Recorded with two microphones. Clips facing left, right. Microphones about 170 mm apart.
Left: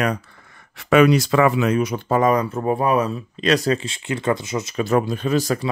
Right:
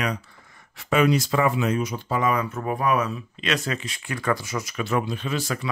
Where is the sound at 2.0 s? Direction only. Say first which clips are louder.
Left 6 dB; 45° left (ahead or behind); by 4.7 s 20° left (ahead or behind).